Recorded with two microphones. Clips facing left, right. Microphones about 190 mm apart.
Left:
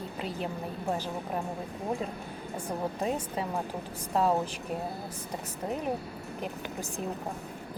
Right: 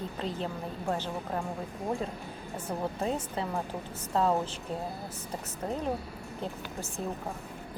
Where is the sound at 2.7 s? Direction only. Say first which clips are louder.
Even; 15° left (ahead or behind).